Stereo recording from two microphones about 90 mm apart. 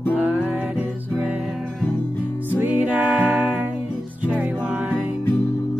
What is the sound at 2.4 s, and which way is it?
Music, 20° right (ahead or behind).